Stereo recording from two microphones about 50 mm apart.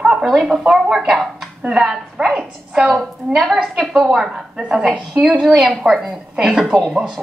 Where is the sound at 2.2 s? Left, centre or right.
Centre.